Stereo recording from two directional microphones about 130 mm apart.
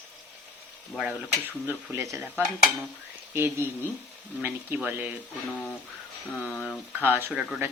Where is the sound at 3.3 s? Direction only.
20° right (ahead or behind).